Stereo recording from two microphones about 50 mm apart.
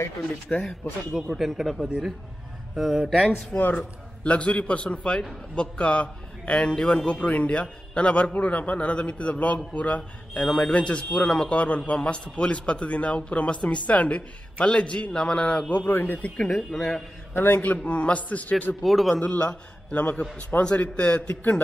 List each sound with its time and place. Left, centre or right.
0.5 s a man's voice: left
1.3 s speech: centre
3.5 s a man's voice: left
10.4 s speech: centre
10.7 s a man's voice: left
15.9 s speech: left
16.3 s speech: centre
17.3 s a man's voice: left
18.8 s speech: centre
19.2 s a man's voice: left